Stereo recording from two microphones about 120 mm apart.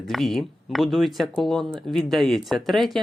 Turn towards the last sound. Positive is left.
turn(degrees=0)  # may be behind; listen again after turning